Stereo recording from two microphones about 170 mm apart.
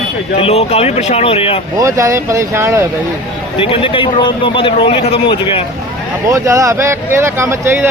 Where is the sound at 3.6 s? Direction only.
35° left (ahead or behind).